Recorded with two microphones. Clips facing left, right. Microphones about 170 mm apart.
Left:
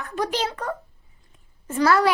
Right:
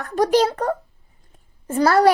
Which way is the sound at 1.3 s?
35° right (ahead or behind).